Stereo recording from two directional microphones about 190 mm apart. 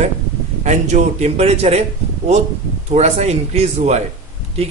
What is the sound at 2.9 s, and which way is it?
Speech, 35° right (ahead or behind).